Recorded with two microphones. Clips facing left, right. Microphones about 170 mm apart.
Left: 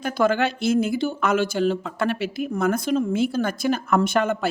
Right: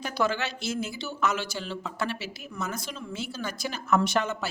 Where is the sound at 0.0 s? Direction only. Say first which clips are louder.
Left 7 dB; 50° left (ahead or behind).